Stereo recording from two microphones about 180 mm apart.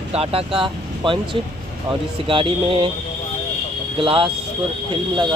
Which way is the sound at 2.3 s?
30° right (ahead or behind).